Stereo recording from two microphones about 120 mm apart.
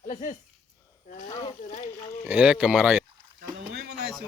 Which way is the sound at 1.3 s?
45° left (ahead or behind).